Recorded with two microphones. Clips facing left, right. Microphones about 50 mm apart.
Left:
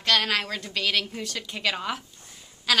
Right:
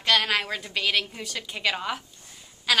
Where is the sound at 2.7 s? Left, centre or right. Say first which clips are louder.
Even; centre.